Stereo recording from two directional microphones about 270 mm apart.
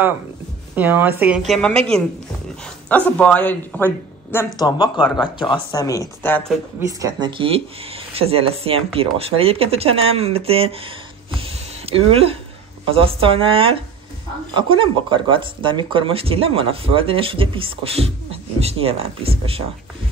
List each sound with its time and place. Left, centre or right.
0.7 s a woman's voice: centre
3.1 s speech: centre
6.9 s speech: centre